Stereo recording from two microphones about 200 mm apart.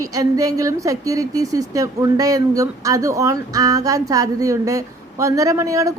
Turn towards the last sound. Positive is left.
turn(degrees=-15)  # may be behind; listen again after turning